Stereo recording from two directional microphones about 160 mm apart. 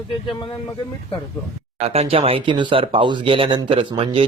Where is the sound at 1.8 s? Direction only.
40° right (ahead or behind).